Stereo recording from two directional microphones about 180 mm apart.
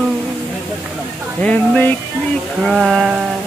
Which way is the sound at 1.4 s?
10° left (ahead or behind).